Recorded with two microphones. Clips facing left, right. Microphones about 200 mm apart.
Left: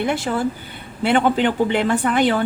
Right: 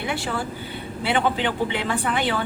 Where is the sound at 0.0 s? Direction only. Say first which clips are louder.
Left 7 dB; 45° left (ahead or behind).